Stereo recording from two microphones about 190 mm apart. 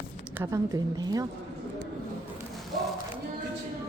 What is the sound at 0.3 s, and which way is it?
Speech, 15° right (ahead or behind).